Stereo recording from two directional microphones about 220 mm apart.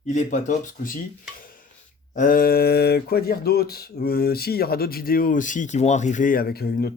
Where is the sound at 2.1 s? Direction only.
40° left (ahead or behind).